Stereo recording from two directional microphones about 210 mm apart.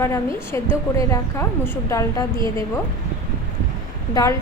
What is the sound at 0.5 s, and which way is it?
A woman's voice, 15° left (ahead or behind).